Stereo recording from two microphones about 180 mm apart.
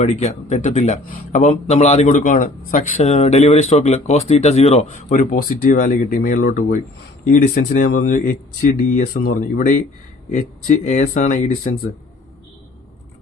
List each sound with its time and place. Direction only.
0.0 s a man's voice: 35° left (ahead or behind)